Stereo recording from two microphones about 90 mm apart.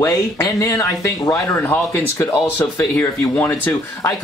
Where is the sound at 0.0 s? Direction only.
30° left (ahead or behind).